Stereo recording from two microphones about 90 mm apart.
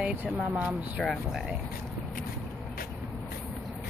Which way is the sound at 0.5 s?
15° right (ahead or behind).